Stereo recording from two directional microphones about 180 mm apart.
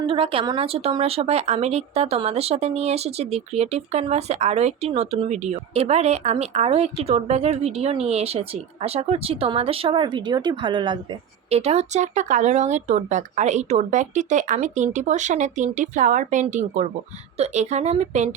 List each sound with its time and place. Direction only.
0.0 s speech: 30° right (ahead or behind)